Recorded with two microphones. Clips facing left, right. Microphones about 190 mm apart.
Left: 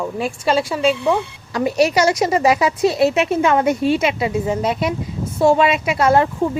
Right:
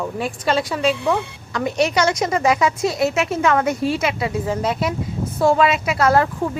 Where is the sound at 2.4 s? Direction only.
35° left (ahead or behind).